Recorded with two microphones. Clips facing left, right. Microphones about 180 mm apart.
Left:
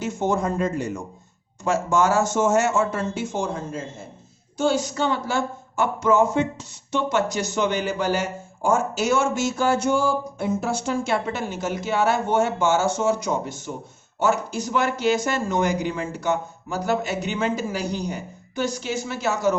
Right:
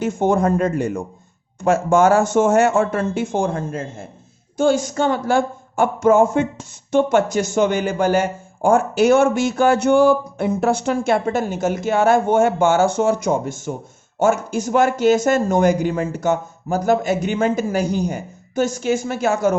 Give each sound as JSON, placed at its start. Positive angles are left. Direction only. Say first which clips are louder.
{"t": 0.0, "sound": "speech", "louder": "right 6 dB", "side_deg": -55}